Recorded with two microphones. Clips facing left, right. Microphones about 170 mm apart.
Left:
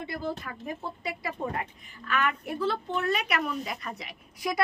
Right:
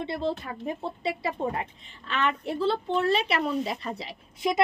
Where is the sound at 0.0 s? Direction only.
25° right (ahead or behind).